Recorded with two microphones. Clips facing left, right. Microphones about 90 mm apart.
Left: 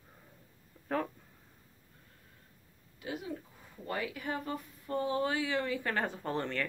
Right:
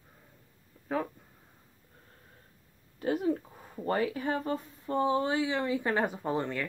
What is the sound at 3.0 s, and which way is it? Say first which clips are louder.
Speech: right 11 dB; 45° right (ahead or behind).